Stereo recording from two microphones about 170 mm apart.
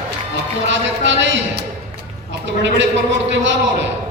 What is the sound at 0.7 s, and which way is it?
Speech, 90° right.